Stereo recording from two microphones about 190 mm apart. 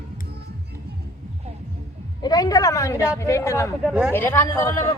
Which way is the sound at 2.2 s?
20° left (ahead or behind).